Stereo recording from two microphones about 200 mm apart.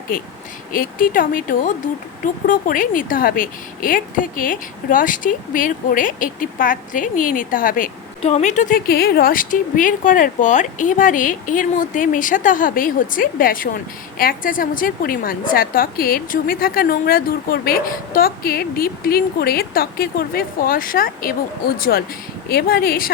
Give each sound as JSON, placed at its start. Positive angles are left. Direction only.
{"t": 0.7, "sound": "a woman's voice", "side_deg": 45}
{"t": 8.9, "sound": "a woman's voice", "side_deg": 50}